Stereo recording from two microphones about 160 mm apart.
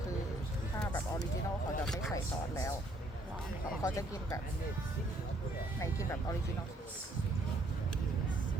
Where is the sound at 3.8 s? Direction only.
20° left (ahead or behind).